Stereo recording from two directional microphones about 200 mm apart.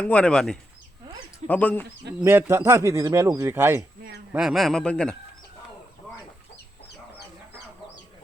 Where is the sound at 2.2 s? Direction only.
10° right (ahead or behind); by 5.1 s 5° left (ahead or behind).